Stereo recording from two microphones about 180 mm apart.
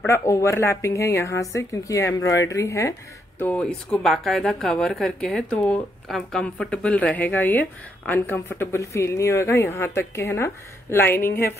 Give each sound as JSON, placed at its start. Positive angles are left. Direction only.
{"t": 0.0, "sound": "a woman's voice", "side_deg": 15}